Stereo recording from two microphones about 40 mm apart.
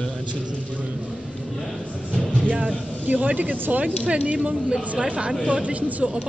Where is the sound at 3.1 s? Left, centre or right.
Right.